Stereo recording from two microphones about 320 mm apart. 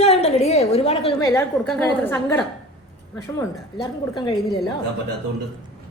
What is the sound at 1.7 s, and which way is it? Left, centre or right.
A woman's voice, centre.